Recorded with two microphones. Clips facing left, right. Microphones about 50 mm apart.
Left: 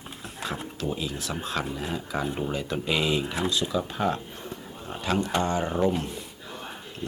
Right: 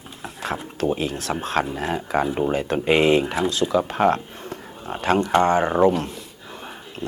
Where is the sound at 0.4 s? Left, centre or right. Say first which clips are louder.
Right 7 dB; right.